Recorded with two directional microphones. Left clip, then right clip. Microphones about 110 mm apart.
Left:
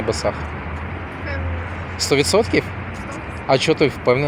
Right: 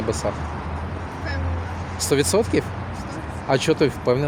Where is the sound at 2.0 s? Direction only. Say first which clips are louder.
Left 3 dB; 30° right (ahead or behind).